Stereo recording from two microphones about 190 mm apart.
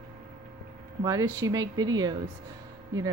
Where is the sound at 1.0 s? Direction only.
20° right (ahead or behind).